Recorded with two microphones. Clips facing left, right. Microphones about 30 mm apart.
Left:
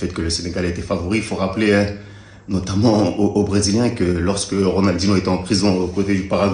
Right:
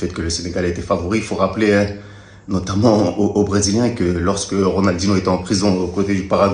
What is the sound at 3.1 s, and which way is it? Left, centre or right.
Speech, left.